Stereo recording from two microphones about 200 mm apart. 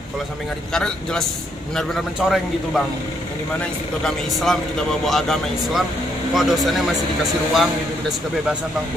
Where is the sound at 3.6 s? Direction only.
Centre (ahead or behind).